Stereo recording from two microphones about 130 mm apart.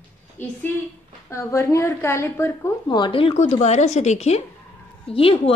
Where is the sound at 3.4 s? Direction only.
60° left (ahead or behind).